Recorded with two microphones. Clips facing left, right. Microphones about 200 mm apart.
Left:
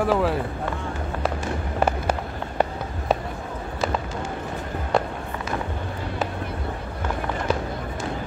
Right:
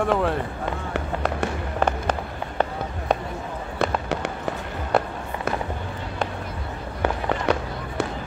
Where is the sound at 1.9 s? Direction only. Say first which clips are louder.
Even; 10° left (ahead or behind).